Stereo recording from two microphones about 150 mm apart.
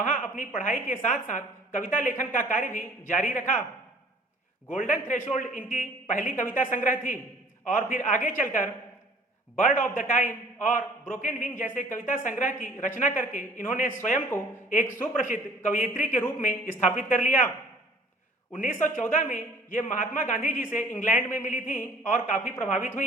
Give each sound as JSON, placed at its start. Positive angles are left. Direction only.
{"t": 0.0, "sound": "a woman's voice", "side_deg": 60}
{"t": 4.8, "sound": "a man's voice", "side_deg": 60}
{"t": 15.2, "sound": "a man's voice", "side_deg": 60}
{"t": 18.5, "sound": "a man's voice", "side_deg": 60}